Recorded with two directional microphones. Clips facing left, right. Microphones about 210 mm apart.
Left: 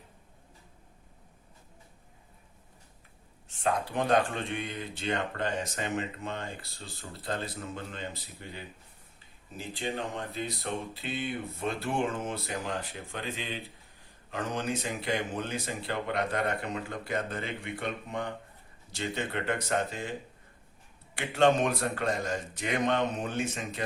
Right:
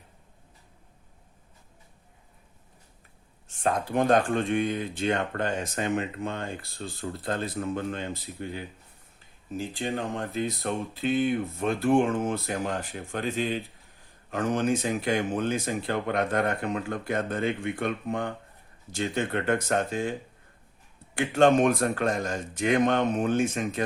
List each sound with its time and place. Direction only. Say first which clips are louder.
3.6 s speech: right 4 dB; 50° right (ahead or behind)
9.6 s speech: right 4 dB; 45° right (ahead or behind)
21.2 s speech: right 4 dB; 50° right (ahead or behind)